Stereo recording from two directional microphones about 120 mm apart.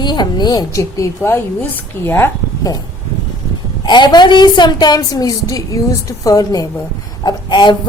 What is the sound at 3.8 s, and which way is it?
Speech, 40° left (ahead or behind).